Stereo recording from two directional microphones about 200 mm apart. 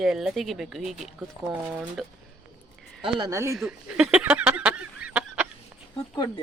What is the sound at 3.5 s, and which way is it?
Speech, 5° right (ahead or behind).